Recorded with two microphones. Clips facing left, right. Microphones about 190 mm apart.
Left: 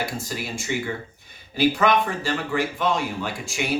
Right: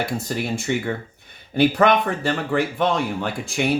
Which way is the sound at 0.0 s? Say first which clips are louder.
Right 4 dB; 55° right (ahead or behind).